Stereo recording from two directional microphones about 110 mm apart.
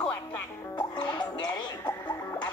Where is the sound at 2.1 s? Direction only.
25° left (ahead or behind).